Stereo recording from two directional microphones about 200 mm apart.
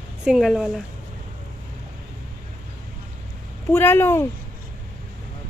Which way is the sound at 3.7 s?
10° left (ahead or behind).